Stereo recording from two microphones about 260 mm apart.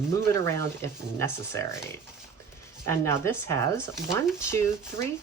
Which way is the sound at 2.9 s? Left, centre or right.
Centre.